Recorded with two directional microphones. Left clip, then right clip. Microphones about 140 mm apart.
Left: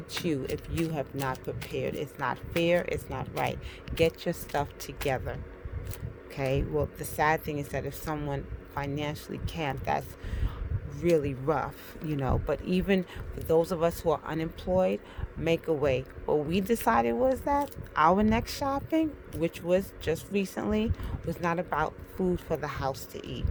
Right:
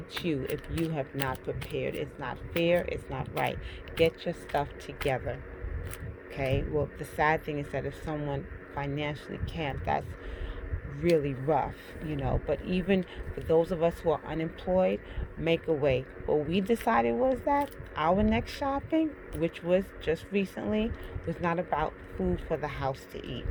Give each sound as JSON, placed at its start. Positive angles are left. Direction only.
{"t": 0.2, "sound": "speech", "side_deg": 50}
{"t": 11.1, "sound": "speech", "side_deg": 40}